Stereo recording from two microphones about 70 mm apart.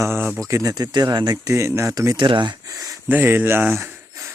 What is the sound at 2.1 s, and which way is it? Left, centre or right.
Speech, right.